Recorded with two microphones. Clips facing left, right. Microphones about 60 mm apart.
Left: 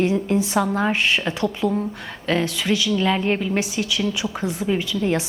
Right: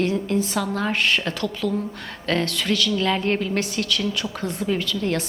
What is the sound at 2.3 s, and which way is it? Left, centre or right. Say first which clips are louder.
A woman's voice: left 2 dB; centre.